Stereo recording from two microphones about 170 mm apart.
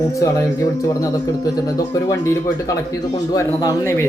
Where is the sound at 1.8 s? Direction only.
20° left (ahead or behind).